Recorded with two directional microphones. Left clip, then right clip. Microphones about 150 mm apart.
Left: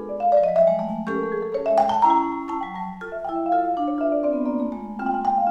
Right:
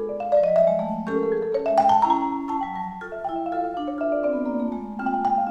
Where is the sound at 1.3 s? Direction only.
5° right (ahead or behind).